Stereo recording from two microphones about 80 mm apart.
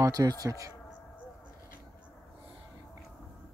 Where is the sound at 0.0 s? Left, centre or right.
Right.